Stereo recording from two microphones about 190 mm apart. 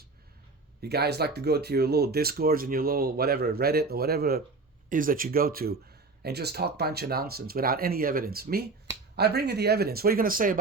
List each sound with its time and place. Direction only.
0.8 s speech: 60° right (ahead or behind)